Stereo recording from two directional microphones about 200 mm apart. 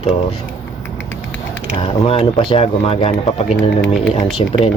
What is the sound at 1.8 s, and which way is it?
Speech, 25° left (ahead or behind).